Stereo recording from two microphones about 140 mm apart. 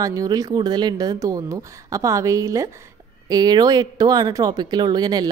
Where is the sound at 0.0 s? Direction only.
25° right (ahead or behind).